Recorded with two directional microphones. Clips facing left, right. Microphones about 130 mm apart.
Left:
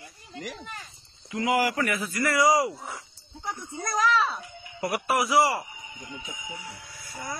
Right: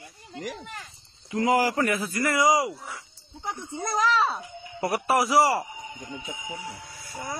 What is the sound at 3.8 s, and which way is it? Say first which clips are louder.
A child's voice: right 1 dB; 25° right (ahead or behind).